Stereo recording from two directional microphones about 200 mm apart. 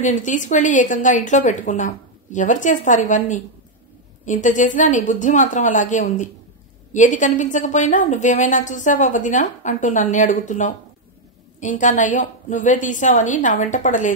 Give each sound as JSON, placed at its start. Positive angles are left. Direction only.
{"t": 0.0, "sound": "a woman's voice", "side_deg": 40}